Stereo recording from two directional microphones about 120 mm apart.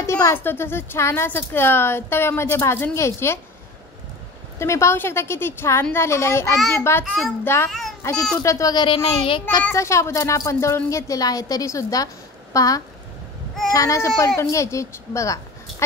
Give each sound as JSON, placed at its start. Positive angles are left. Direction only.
{"t": 0.0, "sound": "a woman's voice", "side_deg": 20}
{"t": 4.6, "sound": "a woman's voice", "side_deg": 25}
{"t": 9.7, "sound": "a woman's voice", "side_deg": 25}